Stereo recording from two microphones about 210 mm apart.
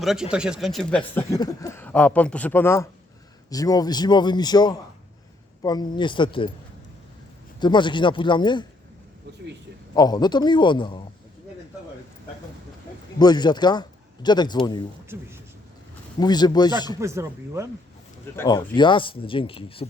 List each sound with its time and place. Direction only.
0.0 s speech: centre (ahead or behind); by 6.5 s 25° left (ahead or behind)
7.6 s speech: 20° left (ahead or behind)
9.9 s speech: 20° left (ahead or behind)
13.1 s a man's voice: 20° left (ahead or behind)
16.2 s speech: 20° left (ahead or behind)
17.0 s speech: 15° right (ahead or behind)
18.3 s speech: 20° left (ahead or behind)